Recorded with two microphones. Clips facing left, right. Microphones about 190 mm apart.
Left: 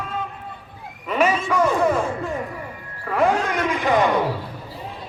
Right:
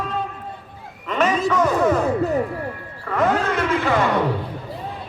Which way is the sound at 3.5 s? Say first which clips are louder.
Right 1 dB; 15° left (ahead or behind).